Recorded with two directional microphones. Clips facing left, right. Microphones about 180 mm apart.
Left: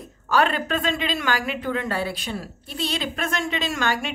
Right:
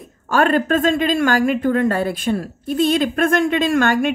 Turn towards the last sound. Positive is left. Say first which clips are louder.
# right 9 dB
turn(degrees=-55)  # may be behind; listen again after turning